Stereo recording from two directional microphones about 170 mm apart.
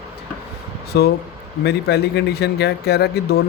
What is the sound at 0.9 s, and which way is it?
Speech, 70° left (ahead or behind).